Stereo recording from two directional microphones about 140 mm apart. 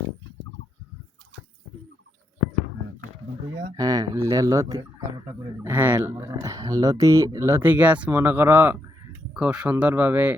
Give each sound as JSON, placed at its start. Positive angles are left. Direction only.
{"t": 3.8, "sound": "speech", "side_deg": -25}